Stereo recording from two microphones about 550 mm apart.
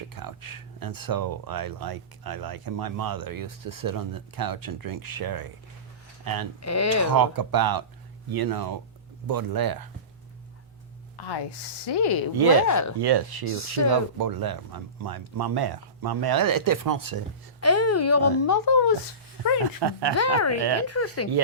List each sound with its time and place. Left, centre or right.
0.1 s speech: right
6.6 s speech: left
7.1 s speech: right
11.2 s speech: left
12.6 s speech: left
13.0 s speech: right
13.4 s speech: left
14.2 s speech: right
17.6 s speech: left
19.8 s speech: right
20.1 s speech: left